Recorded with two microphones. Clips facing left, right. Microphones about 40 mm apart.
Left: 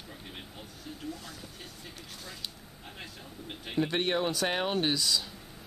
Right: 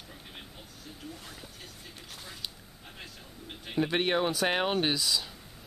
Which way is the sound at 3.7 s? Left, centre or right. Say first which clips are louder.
Right 1 dB; centre.